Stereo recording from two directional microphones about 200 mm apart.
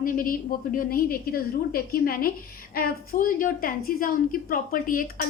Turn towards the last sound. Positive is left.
turn(degrees=45)  # may be behind; listen again after turning